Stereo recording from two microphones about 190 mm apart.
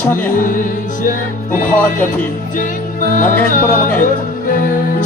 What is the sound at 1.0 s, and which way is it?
Music, 45° left (ahead or behind).